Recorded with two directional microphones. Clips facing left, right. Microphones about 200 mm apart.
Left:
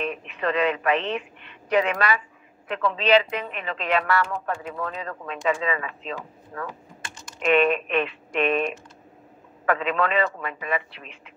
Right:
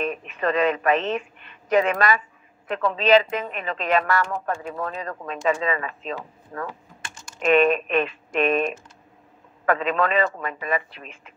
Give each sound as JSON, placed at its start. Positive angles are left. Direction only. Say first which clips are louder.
{"t": 0.0, "sound": "speech", "louder": "right 2 dB", "side_deg": -45}